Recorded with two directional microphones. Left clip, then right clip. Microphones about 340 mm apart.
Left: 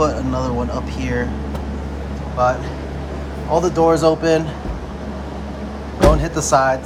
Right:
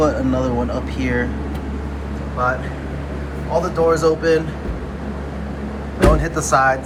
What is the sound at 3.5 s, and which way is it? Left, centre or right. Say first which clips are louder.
Speech: left 2 dB; left.